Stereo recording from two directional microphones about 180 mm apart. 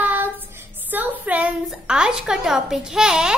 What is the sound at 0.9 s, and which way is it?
A woman's voice, 10° right (ahead or behind).